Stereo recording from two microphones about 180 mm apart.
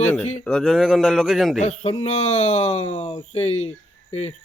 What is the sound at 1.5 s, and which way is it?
Speech, 35° left (ahead or behind).